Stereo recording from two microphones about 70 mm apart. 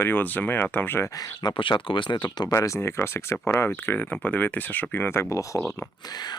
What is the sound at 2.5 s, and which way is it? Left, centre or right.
Speech, left.